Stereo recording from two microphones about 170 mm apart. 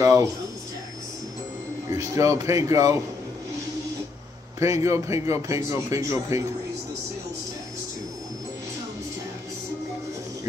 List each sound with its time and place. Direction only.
0.0 s a sound: 20° right (ahead or behind)
1.9 s speech: 20° right (ahead or behind)
4.6 s a man's voice: 20° right (ahead or behind)